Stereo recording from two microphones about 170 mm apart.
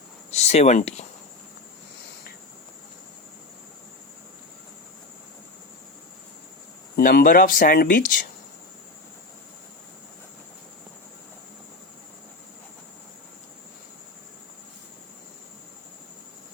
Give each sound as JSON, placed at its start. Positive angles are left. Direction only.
{"t": 0.3, "sound": "speech", "side_deg": 40}
{"t": 6.9, "sound": "speech", "side_deg": 65}